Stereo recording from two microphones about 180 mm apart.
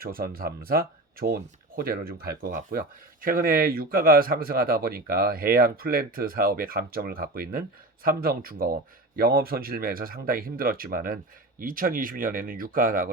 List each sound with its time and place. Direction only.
0.0 s speech: 55° right (ahead or behind)